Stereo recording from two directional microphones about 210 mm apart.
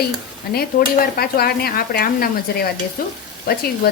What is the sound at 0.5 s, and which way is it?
Stir, 50° left (ahead or behind).